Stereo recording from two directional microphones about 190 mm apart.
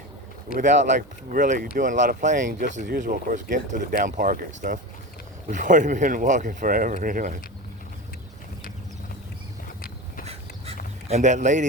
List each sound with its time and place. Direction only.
0.6 s speech: 45° right (ahead or behind)
11.1 s a man's voice: 40° right (ahead or behind)